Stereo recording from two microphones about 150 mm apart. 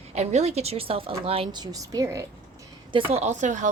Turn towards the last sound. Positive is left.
turn(degrees=-55)  # may be behind; listen again after turning